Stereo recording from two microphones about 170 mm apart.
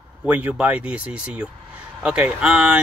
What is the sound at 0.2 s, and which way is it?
Speech, 10° right (ahead or behind).